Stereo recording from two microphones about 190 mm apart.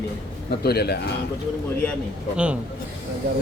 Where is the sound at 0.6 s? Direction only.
55° left (ahead or behind).